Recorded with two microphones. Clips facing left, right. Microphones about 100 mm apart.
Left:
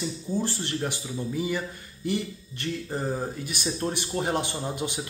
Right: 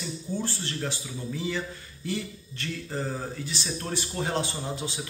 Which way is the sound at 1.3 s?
10° left (ahead or behind).